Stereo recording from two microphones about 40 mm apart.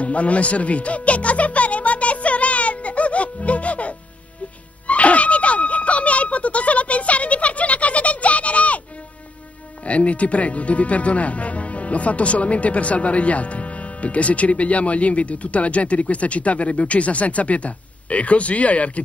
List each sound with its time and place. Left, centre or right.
0.0 s music: left
4.8 s a sound: left
9.8 s speech: left